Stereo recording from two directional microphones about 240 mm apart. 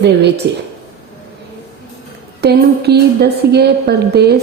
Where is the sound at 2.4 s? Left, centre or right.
Right.